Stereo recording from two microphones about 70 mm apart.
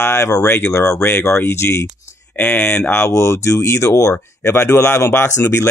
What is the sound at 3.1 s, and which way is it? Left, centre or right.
Speech, left.